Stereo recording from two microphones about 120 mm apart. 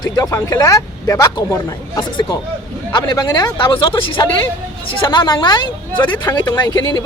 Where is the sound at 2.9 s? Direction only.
35° left (ahead or behind).